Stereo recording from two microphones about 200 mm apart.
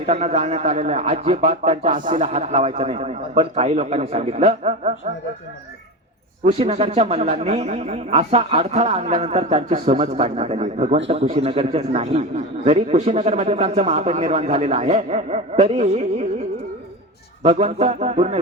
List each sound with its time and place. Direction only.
0.0 s a man's voice: 30° right (ahead or behind)
6.4 s a man's voice: 30° right (ahead or behind)
17.4 s a man's voice: 35° right (ahead or behind)